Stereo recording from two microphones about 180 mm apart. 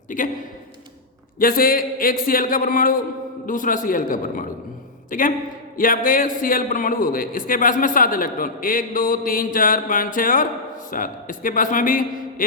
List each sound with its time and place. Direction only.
0.1 s a man's voice: 45° left (ahead or behind)
1.4 s a man's voice: 50° left (ahead or behind)